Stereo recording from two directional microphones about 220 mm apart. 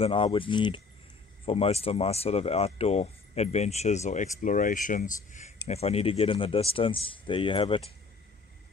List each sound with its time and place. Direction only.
0.0 s speech: 25° left (ahead or behind)